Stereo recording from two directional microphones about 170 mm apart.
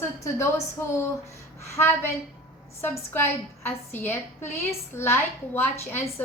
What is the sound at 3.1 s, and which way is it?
A woman's voice, 10° left (ahead or behind).